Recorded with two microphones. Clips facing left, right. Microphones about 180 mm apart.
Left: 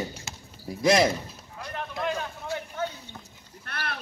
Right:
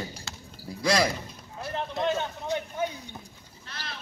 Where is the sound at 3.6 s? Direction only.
60° left (ahead or behind).